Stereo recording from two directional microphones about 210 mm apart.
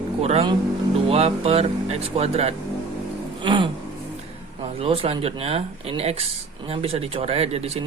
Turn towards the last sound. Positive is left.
turn(degrees=-30)  # may be behind; listen again after turning